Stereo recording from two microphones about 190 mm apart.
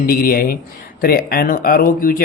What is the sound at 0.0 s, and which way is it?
Speech, 50° left (ahead or behind).